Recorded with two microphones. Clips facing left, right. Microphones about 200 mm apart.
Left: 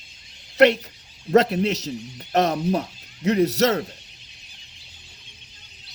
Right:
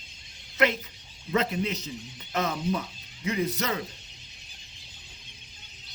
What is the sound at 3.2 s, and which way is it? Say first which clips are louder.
Speech: left 10 dB; 70° left (ahead or behind).